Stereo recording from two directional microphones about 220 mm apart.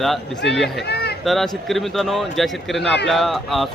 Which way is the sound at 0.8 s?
50° left (ahead or behind).